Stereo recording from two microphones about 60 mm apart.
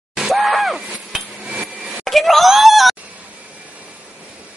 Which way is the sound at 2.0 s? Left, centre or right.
Centre.